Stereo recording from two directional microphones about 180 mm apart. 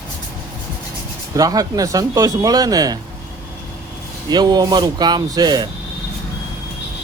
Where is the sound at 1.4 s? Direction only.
20° right (ahead or behind).